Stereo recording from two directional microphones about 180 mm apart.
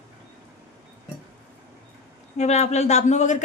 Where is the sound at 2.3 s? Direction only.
40° left (ahead or behind).